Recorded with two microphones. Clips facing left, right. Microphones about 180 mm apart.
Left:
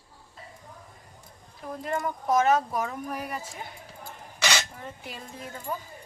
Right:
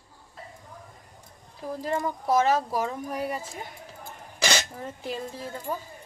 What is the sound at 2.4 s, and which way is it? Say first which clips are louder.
Speech: even; 30° right (ahead or behind).